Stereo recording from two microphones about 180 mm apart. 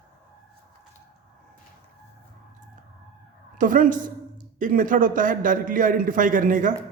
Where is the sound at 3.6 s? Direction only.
50° right (ahead or behind).